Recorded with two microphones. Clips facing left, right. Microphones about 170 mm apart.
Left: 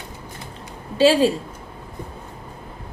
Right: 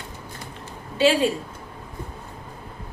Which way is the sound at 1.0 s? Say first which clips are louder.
Left 4 dB; 35° left (ahead or behind).